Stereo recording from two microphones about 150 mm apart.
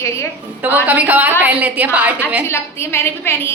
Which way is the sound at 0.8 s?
10° right (ahead or behind).